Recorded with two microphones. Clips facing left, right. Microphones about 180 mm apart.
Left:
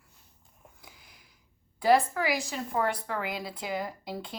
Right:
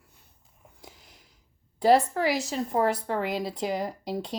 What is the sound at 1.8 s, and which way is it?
A woman's voice, 35° right (ahead or behind).